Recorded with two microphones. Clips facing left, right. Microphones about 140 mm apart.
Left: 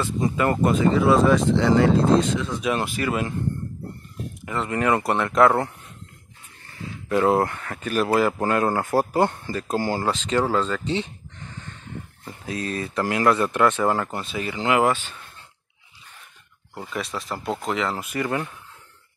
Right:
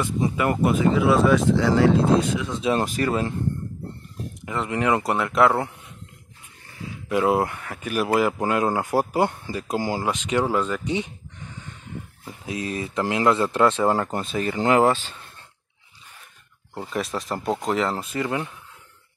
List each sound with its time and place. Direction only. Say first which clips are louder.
0.0 s speech: even; 15° right (ahead or behind)
2.5 s speech: right 4 dB; 25° right (ahead or behind)
2.8 s speech: right 2 dB; 40° right (ahead or behind)
4.5 s speech: even; 15° right (ahead or behind)
7.1 s speech: left 1 dB; 10° right (ahead or behind)
12.4 s speech: even; 15° right (ahead or behind)
14.3 s speech: right 3 dB; 40° right (ahead or behind)
17.0 s speech: right 3 dB; centre (ahead or behind)
17.7 s speech: right 2 dB; 35° right (ahead or behind)
18.2 s speech: left 1 dB; 20° right (ahead or behind)